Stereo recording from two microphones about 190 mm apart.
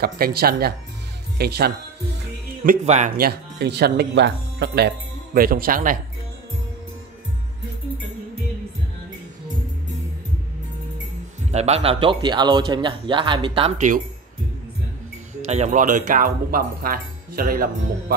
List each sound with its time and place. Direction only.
0.0 s speech: 55° right (ahead or behind)
2.6 s speech: 45° right (ahead or behind)
3.2 s speech: 60° right (ahead or behind)
11.5 s a man's voice: 35° right (ahead or behind)
15.4 s speech: 35° right (ahead or behind); by 18.1 s 50° right (ahead or behind)